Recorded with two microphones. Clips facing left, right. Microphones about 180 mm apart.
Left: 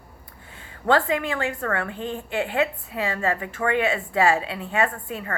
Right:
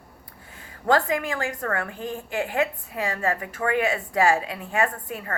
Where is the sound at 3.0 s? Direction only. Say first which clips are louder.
Left 1 dB; 40° right (ahead or behind).